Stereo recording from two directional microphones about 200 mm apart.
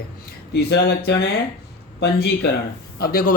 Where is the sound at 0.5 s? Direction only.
55° left (ahead or behind).